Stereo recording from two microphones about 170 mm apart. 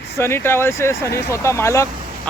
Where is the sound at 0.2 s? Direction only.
15° left (ahead or behind).